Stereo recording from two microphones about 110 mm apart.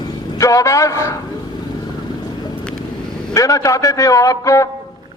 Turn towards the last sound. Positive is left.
turn(degrees=30)  # may be behind; listen again after turning